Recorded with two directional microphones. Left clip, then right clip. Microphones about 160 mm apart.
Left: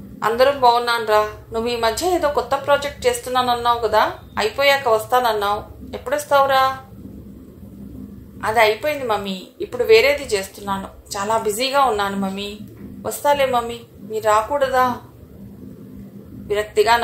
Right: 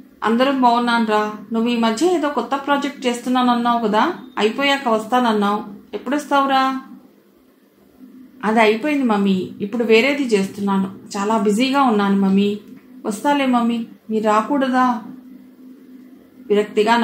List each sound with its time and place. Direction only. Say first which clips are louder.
0.2 s a woman's voice: left 1 dB; 35° left (ahead or behind)
8.4 s a woman's voice: right 1 dB; 40° left (ahead or behind)
16.4 s a woman's voice: right 1 dB; 40° left (ahead or behind)